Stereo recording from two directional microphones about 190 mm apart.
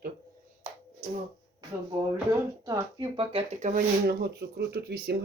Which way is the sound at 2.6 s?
20° right (ahead or behind).